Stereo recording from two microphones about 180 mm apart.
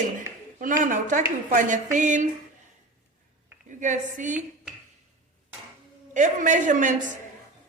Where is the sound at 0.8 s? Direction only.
45° right (ahead or behind).